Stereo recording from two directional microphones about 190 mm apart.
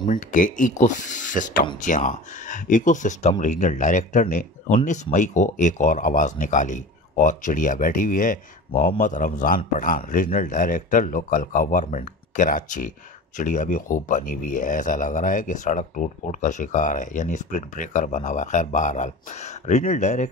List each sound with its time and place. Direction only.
0.0 s speech: 45° left (ahead or behind)